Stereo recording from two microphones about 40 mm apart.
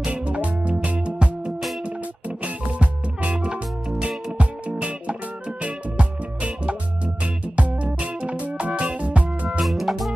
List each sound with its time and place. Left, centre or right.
0.0 s music: right
3.4 s music: right
9.7 s music: centre